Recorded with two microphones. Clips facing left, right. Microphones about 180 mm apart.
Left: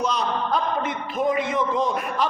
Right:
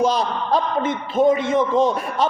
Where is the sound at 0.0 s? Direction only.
35° right (ahead or behind).